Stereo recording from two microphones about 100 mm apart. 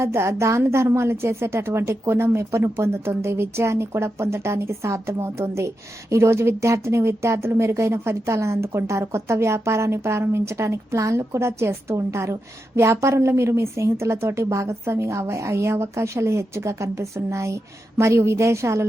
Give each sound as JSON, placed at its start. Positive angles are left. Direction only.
{"t": 0.0, "sound": "a woman's voice", "side_deg": -25}